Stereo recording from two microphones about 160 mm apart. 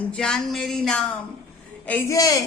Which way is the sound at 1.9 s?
15° left (ahead or behind).